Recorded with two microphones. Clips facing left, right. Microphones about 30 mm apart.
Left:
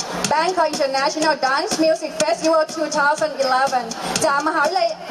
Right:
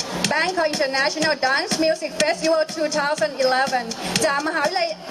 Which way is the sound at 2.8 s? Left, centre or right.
Centre.